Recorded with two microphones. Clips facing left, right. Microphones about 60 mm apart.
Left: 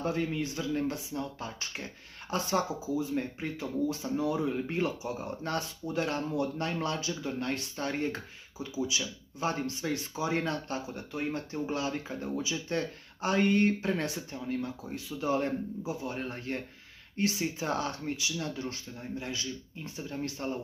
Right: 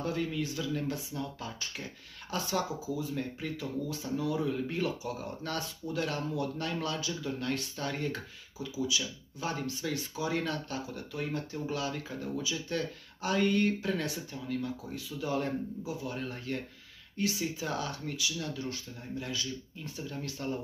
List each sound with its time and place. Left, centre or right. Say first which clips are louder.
0.0 s speech: left 2 dB; left